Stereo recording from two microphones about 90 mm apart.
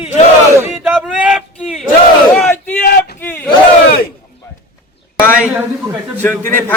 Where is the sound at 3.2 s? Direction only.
20° left (ahead or behind).